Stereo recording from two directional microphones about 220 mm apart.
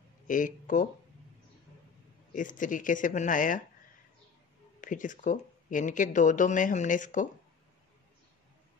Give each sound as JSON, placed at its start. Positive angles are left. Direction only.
{"t": 0.3, "sound": "speech", "side_deg": 35}
{"t": 2.3, "sound": "speech", "side_deg": 35}
{"t": 4.7, "sound": "speech", "side_deg": 35}